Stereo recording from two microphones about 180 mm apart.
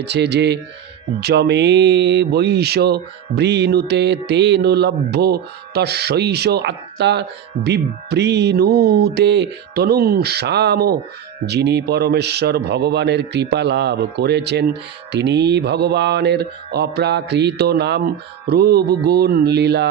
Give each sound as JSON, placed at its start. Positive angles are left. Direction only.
{"t": 0.0, "sound": "speech", "side_deg": -70}
{"t": 18.4, "sound": "music", "side_deg": -60}